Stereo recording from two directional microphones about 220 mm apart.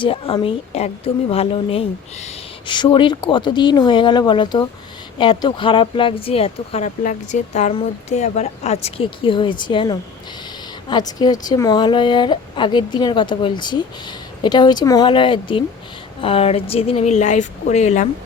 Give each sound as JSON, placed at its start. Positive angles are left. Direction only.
{"t": 0.0, "sound": "speech", "side_deg": 25}